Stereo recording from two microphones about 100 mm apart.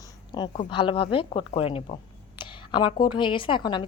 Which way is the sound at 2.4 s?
50° left (ahead or behind).